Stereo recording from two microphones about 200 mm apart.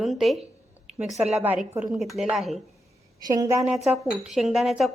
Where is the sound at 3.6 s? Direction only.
Centre (ahead or behind).